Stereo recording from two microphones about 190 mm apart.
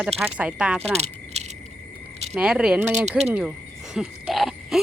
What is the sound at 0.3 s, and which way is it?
Speech, 5° right (ahead or behind).